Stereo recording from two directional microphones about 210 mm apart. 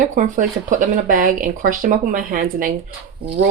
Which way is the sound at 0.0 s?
40° right (ahead or behind).